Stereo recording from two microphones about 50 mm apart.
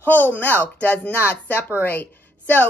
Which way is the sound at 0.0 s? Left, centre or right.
Left.